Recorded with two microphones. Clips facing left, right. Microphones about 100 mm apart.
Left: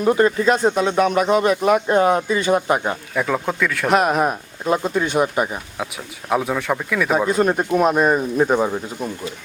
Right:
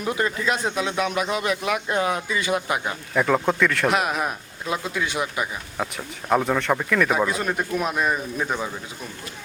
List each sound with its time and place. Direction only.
0.0 s speech: 35° left (ahead or behind)
3.2 s speech: centre (ahead or behind)
3.8 s speech: 40° left (ahead or behind)
6.3 s speech: 5° left (ahead or behind)
7.3 s speech: 40° left (ahead or behind)